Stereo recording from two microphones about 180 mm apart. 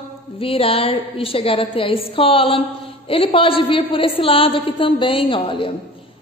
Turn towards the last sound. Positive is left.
turn(degrees=30)  # may be behind; listen again after turning